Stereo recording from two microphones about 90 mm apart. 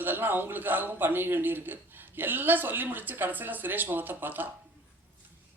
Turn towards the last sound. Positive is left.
turn(degrees=-20)  # may be behind; listen again after turning